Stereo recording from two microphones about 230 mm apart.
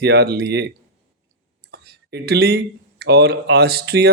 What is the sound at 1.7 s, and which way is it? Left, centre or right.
Speech, right.